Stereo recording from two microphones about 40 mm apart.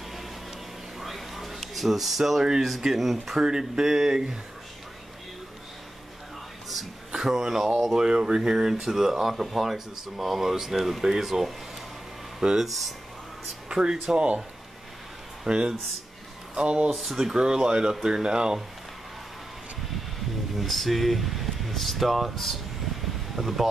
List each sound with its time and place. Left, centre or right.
0.9 s a sound: centre
2.8 s speech: centre
3.4 s speech: centre
7.1 s speech: centre
13.7 s speech: centre
15.4 s speech: right
16.9 s speech: centre
17.3 s speech: centre
20.5 s speech: centre